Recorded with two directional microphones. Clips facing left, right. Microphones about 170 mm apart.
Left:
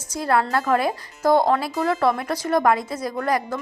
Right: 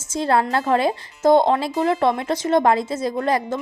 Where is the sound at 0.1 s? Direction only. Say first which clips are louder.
Right 2 dB; 25° right (ahead or behind).